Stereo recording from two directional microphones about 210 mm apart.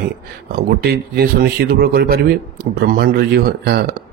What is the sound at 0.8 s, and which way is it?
Speech, 45° right (ahead or behind).